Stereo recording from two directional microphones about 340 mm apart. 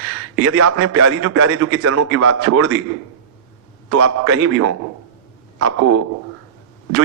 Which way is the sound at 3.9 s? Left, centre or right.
Right.